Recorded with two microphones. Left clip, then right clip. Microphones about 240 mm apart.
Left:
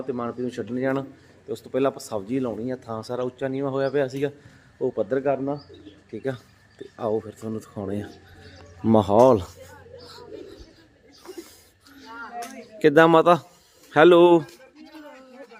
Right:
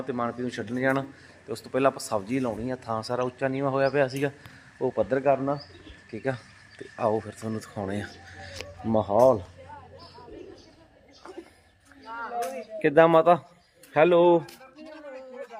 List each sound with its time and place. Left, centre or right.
0.0 s speech: centre
8.9 s speech: left
11.2 s a sound: centre
12.8 s a man's voice: left